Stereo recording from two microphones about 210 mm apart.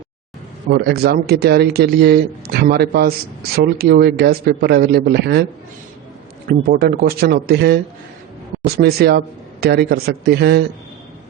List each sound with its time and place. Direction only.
0.7 s a man's voice: 50° right (ahead or behind)
6.5 s a man's voice: 45° right (ahead or behind)